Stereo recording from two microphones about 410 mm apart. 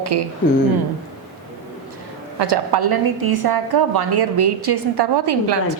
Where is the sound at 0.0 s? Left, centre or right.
Right.